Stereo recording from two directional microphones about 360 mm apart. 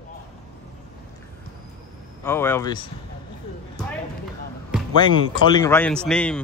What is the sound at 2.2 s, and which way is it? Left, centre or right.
Speech, centre.